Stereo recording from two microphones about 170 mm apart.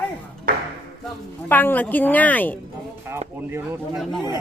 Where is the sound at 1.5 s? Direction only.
10° left (ahead or behind).